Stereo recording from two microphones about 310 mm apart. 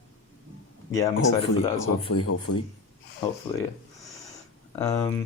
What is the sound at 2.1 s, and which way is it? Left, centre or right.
Speech, left.